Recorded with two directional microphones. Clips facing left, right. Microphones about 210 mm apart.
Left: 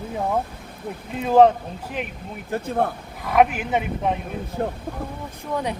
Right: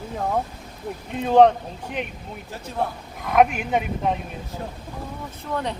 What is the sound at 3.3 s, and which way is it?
Speech, 5° left (ahead or behind).